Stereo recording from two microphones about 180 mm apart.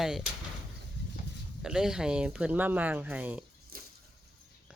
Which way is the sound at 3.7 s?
55° right (ahead or behind).